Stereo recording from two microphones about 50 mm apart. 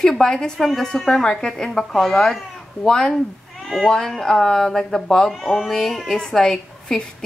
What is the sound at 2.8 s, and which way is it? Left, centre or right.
Speech, centre.